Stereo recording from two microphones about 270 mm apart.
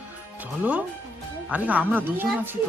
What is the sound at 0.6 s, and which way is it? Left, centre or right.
Speech, centre.